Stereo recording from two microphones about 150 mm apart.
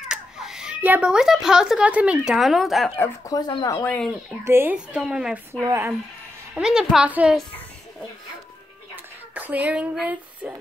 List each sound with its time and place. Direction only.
0.1 s a child's voice: 5° right (ahead or behind)
3.0 s speech: 25° left (ahead or behind)
3.8 s speech: 5° left (ahead or behind)
4.5 s a woman's voice: 15° right (ahead or behind)
5.5 s a woman's voice: 20° right (ahead or behind)
6.5 s a woman's voice: 5° right (ahead or behind)
8.9 s a sound: 10° right (ahead or behind)